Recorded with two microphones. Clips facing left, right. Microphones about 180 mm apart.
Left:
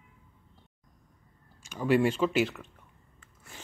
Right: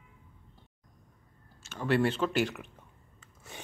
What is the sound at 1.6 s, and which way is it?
Speech, 10° left (ahead or behind).